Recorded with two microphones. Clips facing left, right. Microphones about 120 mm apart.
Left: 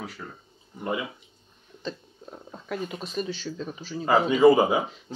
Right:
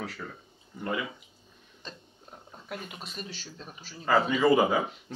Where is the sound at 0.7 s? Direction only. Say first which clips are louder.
Left 2 dB; 20° left (ahead or behind).